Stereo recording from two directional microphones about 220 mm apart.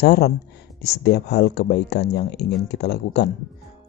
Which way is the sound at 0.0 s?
45° left (ahead or behind).